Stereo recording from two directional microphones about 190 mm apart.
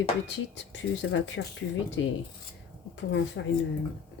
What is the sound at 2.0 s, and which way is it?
Speech, 85° left.